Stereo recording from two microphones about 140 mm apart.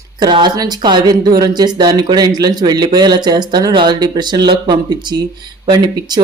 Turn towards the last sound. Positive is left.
turn(degrees=-30)  # may be behind; listen again after turning